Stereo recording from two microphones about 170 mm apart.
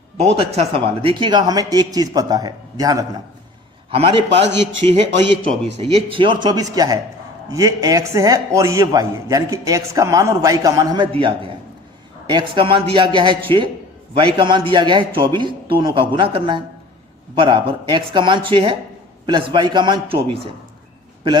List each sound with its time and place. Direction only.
1.0 s a man's voice: 30° right (ahead or behind)
3.9 s a man's voice: 35° right (ahead or behind)